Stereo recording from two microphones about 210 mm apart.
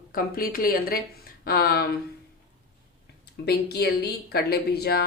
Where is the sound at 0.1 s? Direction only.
45° left (ahead or behind).